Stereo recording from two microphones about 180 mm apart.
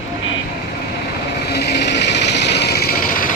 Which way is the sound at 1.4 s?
65° left (ahead or behind).